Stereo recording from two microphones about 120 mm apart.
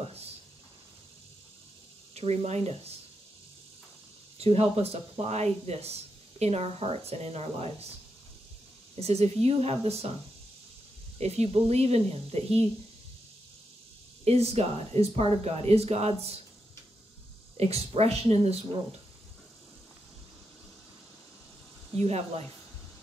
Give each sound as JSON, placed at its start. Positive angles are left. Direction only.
{"t": 2.1, "sound": "speech", "side_deg": -60}
{"t": 4.4, "sound": "speech", "side_deg": -60}
{"t": 9.0, "sound": "speech", "side_deg": -60}
{"t": 11.1, "sound": "speech", "side_deg": -60}
{"t": 14.2, "sound": "speech", "side_deg": -60}
{"t": 17.6, "sound": "speech", "side_deg": -60}
{"t": 21.9, "sound": "speech", "side_deg": -60}